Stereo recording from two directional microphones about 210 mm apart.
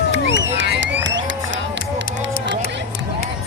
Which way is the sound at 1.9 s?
60° right (ahead or behind).